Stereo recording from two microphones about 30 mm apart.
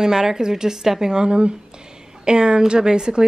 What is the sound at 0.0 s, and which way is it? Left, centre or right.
A woman's voice, centre.